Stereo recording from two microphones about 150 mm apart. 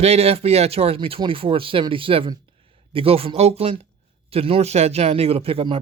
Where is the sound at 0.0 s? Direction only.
45° right (ahead or behind).